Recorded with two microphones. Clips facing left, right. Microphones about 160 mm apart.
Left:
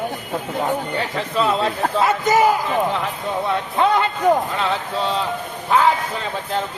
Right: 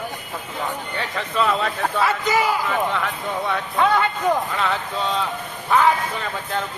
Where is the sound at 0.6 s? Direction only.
40° left (ahead or behind).